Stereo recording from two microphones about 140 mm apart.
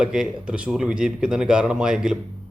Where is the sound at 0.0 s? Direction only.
5° right (ahead or behind).